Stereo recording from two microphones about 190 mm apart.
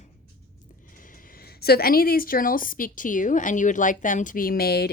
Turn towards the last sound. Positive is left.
turn(degrees=55)  # may be behind; listen again after turning